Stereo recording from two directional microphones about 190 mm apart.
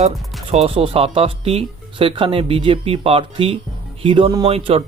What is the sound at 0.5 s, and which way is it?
Speech, 30° right (ahead or behind).